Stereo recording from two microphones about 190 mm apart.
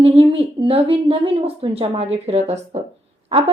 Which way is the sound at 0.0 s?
30° right (ahead or behind).